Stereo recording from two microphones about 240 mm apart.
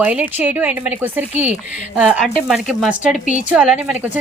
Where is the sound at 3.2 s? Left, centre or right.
Left.